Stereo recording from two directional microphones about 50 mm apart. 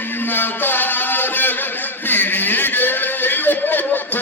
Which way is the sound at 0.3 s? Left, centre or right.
Left.